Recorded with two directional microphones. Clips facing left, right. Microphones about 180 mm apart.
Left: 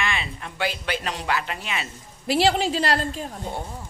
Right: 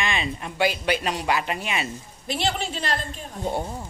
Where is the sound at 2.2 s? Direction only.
85° left.